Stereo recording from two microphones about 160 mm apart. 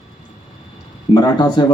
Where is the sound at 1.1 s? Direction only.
25° left (ahead or behind).